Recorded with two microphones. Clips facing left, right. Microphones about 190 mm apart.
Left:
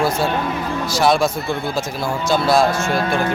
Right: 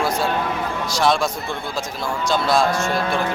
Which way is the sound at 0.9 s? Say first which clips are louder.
Left 3 dB; 5° left (ahead or behind).